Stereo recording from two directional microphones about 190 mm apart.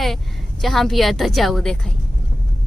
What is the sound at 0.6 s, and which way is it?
A woman's voice, centre (ahead or behind).